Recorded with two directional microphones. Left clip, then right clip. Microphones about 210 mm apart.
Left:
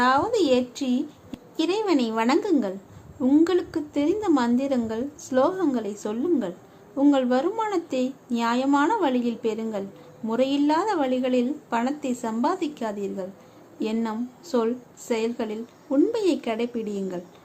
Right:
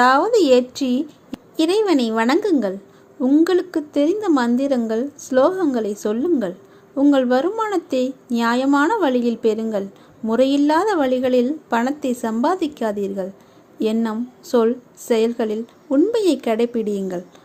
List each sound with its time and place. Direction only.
0.0 s a woman's voice: 25° right (ahead or behind)